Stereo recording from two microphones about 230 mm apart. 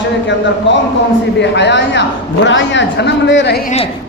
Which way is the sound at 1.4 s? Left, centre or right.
Left.